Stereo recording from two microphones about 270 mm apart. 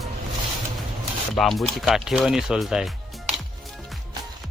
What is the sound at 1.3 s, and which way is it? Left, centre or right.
Speech, centre.